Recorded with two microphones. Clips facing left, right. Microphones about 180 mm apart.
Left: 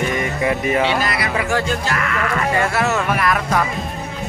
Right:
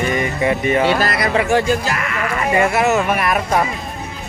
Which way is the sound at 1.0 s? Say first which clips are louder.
Right 3 dB; 40° right (ahead or behind).